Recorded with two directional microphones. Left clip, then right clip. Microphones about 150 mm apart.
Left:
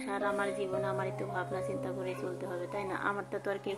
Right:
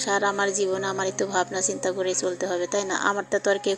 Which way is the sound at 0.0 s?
40° right (ahead or behind).